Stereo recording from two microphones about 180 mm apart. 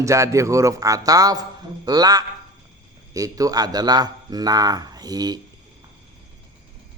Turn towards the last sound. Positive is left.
turn(degrees=-20)  # may be behind; listen again after turning